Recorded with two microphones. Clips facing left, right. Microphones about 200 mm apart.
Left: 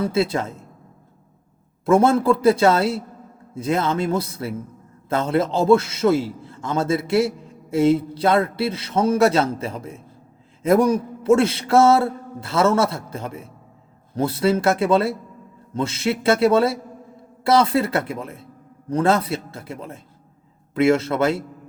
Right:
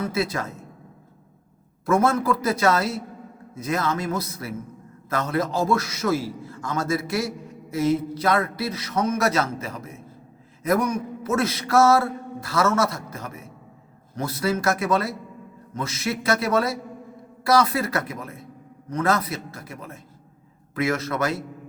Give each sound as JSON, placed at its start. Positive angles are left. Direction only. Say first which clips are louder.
{"t": 0.0, "sound": "a man's voice", "louder": "left 5 dB", "side_deg": 25}
{"t": 1.8, "sound": "a man's voice", "louder": "left 5 dB", "side_deg": 25}